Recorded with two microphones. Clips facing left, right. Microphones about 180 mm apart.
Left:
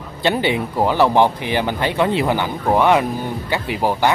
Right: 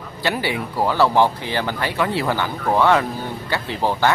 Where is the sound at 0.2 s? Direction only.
20° left (ahead or behind).